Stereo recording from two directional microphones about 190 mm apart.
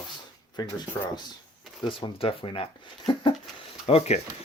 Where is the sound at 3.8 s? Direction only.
30° left (ahead or behind).